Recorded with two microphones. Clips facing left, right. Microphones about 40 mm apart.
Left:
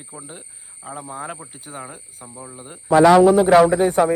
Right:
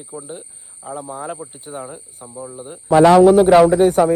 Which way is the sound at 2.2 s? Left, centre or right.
Right.